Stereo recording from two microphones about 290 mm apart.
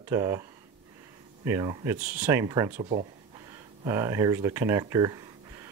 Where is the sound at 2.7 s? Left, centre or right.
Right.